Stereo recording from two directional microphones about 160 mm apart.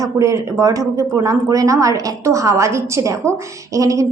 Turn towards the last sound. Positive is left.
turn(degrees=-20)  # may be behind; listen again after turning